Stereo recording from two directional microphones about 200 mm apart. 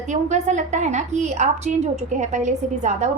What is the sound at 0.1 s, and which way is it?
A woman's voice, 35° right (ahead or behind).